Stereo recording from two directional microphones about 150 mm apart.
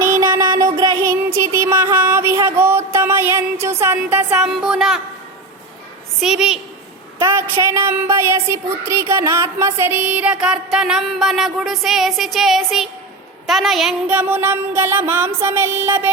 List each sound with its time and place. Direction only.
0.0 s a sound: 20° right (ahead or behind)
6.1 s a woman's voice: 5° right (ahead or behind)
7.3 s a woman's voice: 15° right (ahead or behind)